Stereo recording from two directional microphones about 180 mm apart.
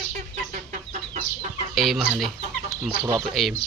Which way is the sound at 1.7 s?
Centre (ahead or behind).